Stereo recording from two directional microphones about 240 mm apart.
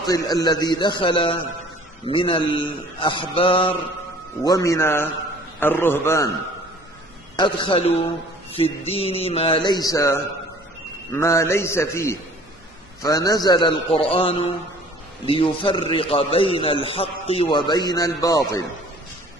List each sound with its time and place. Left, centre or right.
0.0 s a man's voice: centre
7.3 s a man's voice: centre